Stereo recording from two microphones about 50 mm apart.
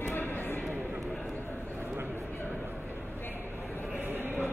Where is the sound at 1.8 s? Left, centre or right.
Right.